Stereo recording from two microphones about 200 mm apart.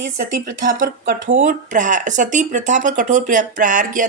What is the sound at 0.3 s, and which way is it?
A woman's voice, 40° right (ahead or behind).